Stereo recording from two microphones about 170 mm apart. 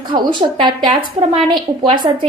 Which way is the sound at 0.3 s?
25° right (ahead or behind).